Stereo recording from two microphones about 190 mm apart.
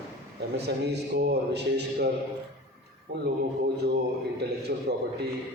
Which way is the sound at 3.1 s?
60° right (ahead or behind).